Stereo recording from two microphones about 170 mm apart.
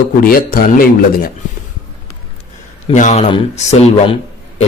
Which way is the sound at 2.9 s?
45° left (ahead or behind).